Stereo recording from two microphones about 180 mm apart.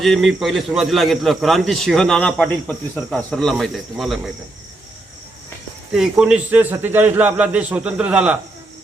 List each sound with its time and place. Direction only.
0.0 s a man's voice: centre (ahead or behind)
5.9 s a man's voice: centre (ahead or behind)